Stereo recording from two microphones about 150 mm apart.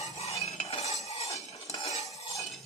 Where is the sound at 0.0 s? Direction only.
45° left (ahead or behind).